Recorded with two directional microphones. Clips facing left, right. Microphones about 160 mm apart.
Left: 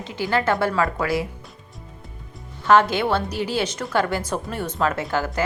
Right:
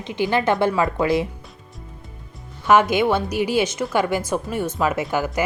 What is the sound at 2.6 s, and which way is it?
A woman's voice, 15° right (ahead or behind).